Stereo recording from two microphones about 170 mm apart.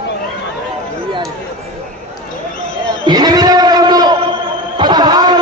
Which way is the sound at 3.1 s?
25° right (ahead or behind).